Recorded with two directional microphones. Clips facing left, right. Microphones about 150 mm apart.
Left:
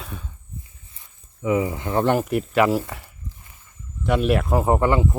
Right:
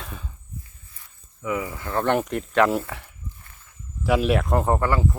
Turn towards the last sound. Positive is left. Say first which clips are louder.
# left 3 dB
turn(degrees=20)  # may be behind; listen again after turning